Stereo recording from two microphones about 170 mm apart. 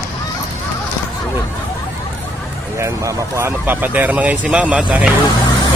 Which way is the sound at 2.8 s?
15° right (ahead or behind).